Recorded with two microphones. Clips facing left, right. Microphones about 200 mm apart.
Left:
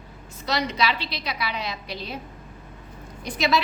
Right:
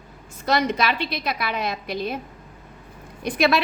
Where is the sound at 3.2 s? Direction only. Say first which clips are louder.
Right 3 dB; 60° right (ahead or behind).